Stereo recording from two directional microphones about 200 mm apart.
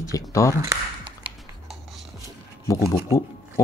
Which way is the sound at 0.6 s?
15° right (ahead or behind).